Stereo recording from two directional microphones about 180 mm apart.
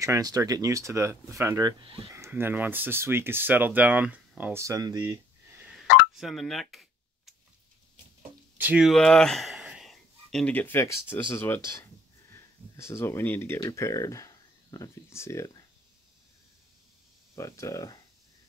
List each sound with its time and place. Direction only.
0.0 s speech: 20° right (ahead or behind)
5.6 s telephone dialing: 5° right (ahead or behind)
6.1 s a sound: centre (ahead or behind)
8.5 s speech: 5° right (ahead or behind); by 15.6 s 20° left (ahead or behind)
17.4 s speech: 15° left (ahead or behind)